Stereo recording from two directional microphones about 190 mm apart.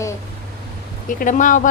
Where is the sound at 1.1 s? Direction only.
45° left (ahead or behind).